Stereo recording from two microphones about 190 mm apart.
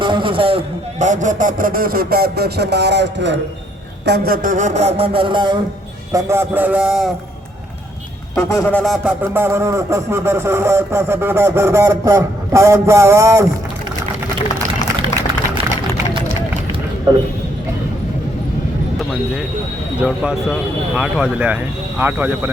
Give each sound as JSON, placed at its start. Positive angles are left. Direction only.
{"t": 0.0, "sound": "speech", "side_deg": -25}
{"t": 4.0, "sound": "a man's voice", "side_deg": -55}
{"t": 8.4, "sound": "a sound", "side_deg": 15}
{"t": 9.3, "sound": "a man's voice", "side_deg": -10}
{"t": 20.0, "sound": "a man's voice", "side_deg": -5}